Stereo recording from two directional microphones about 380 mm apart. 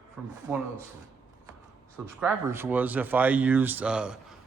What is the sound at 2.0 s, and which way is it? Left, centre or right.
Speech, centre.